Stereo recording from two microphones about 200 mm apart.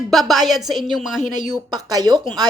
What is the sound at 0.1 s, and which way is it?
A woman's voice, centre (ahead or behind).